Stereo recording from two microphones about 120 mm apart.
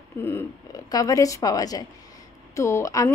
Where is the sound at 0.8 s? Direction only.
30° left (ahead or behind).